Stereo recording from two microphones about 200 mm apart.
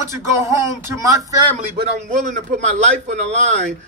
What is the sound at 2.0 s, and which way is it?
Speech, 40° right (ahead or behind).